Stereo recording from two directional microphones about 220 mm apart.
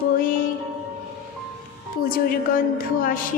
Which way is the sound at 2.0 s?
40° left (ahead or behind).